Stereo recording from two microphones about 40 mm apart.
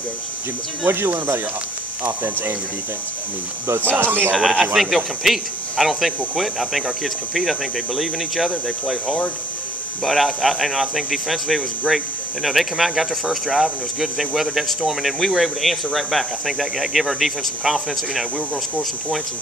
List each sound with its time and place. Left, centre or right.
0.8 s speech: right
4.0 s speech: right
4.4 s speech: centre